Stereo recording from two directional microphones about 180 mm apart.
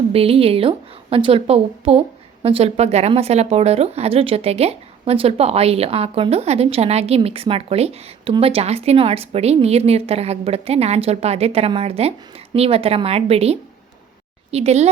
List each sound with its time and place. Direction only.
0.1 s a woman's voice: 30° right (ahead or behind)